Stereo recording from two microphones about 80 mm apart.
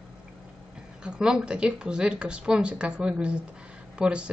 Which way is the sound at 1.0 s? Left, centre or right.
Centre.